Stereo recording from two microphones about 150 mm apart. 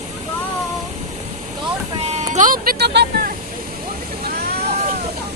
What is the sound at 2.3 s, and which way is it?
Vehicle, 65° right (ahead or behind).